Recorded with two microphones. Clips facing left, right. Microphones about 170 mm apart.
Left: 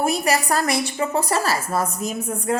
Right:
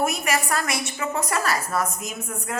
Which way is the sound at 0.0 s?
35° left (ahead or behind).